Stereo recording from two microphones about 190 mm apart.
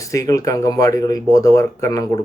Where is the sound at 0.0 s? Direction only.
15° left (ahead or behind).